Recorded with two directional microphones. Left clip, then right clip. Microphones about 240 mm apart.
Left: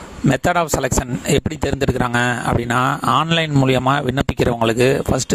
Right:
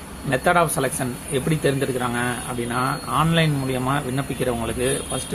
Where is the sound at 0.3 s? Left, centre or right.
Left.